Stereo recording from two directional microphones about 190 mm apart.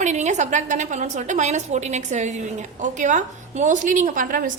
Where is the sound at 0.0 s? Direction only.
40° right (ahead or behind).